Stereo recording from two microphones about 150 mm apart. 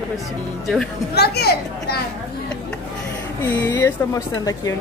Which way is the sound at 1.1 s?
90° left.